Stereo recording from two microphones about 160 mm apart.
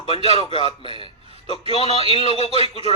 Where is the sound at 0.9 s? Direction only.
35° right (ahead or behind).